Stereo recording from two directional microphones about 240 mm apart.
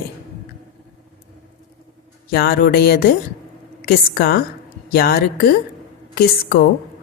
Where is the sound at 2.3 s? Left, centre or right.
Left.